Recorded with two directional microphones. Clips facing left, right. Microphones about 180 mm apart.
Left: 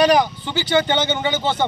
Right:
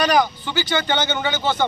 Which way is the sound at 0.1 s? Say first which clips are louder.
Left 2 dB; 25° left (ahead or behind).